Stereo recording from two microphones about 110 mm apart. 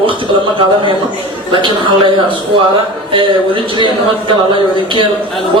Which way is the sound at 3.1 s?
50° right (ahead or behind).